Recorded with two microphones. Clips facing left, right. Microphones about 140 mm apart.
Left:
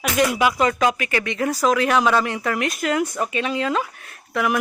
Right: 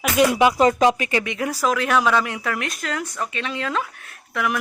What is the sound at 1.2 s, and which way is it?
Speech, 10° right (ahead or behind).